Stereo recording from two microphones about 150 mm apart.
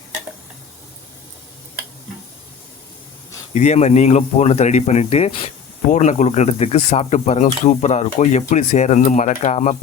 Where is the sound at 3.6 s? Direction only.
50° left (ahead or behind).